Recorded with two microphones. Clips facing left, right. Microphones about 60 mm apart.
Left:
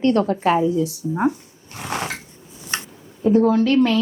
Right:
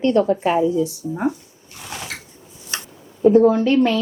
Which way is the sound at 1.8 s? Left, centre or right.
Left.